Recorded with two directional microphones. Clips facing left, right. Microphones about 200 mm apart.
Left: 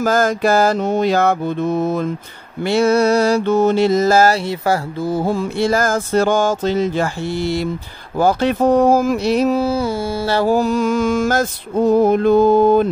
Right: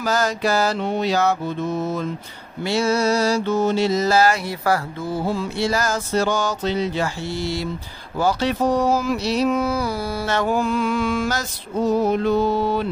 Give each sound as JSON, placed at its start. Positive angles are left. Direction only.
{"t": 0.0, "sound": "mantra", "side_deg": 50}
{"t": 4.5, "sound": "speech", "side_deg": 25}
{"t": 5.0, "sound": "mantra", "side_deg": 45}
{"t": 9.5, "sound": "mantra", "side_deg": 30}